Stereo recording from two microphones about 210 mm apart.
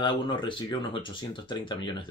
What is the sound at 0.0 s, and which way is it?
Speech, 25° left (ahead or behind).